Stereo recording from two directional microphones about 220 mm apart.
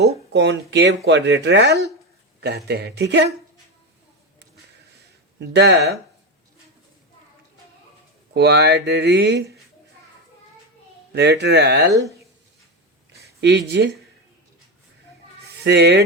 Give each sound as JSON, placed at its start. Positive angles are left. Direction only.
{"t": 0.3, "sound": "speech", "side_deg": -50}
{"t": 5.4, "sound": "speech", "side_deg": -50}
{"t": 8.3, "sound": "speech", "side_deg": -50}
{"t": 11.1, "sound": "speech", "side_deg": -50}
{"t": 13.4, "sound": "speech", "side_deg": -50}
{"t": 15.6, "sound": "speech", "side_deg": -50}